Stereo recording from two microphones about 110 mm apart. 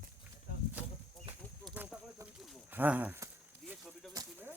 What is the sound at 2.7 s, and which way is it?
Speech, 15° right (ahead or behind).